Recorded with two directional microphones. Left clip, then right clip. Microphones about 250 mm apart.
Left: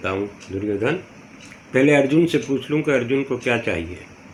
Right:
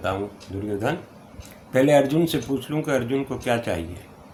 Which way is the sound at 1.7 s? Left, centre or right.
Right.